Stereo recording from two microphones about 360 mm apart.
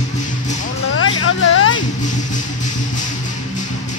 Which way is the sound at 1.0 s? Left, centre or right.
Left.